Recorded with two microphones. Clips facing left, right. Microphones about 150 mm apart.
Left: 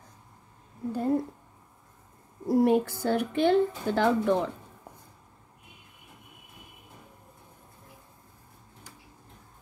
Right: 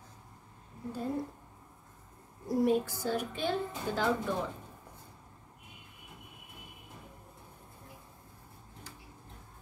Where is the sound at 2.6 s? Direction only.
65° left (ahead or behind).